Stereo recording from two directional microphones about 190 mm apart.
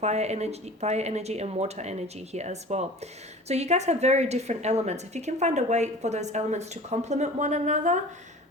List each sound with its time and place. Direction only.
0.0 s a woman's voice: 35° right (ahead or behind)